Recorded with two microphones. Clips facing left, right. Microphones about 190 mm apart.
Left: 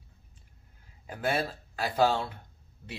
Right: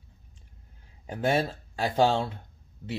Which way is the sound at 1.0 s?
25° right (ahead or behind).